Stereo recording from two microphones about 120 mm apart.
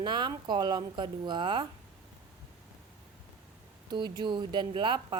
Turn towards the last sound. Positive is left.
turn(degrees=-40)  # may be behind; listen again after turning